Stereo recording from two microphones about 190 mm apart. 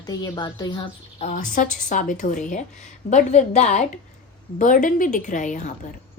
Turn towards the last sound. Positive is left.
turn(degrees=40)  # may be behind; listen again after turning